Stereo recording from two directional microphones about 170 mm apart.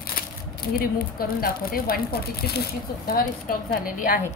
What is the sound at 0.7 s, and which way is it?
Speech, 60° left (ahead or behind).